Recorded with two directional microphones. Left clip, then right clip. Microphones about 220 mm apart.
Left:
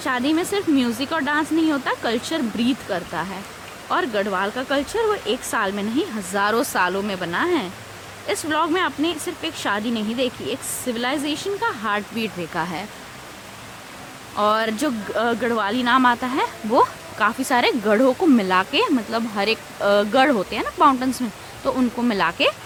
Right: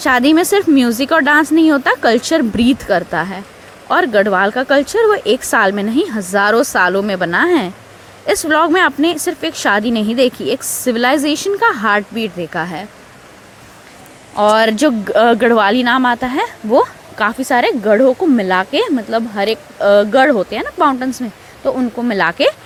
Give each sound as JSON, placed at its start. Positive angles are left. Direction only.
{"t": 0.0, "sound": "speech", "side_deg": -30}
{"t": 14.3, "sound": "speech", "side_deg": -25}